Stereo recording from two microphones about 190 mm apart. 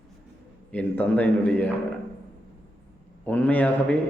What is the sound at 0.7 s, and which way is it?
A man's voice, 5° left (ahead or behind).